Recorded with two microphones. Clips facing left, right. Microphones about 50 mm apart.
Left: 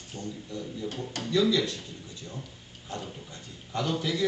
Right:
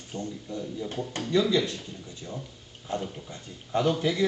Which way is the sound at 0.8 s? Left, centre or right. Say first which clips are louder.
Right 1 dB; centre.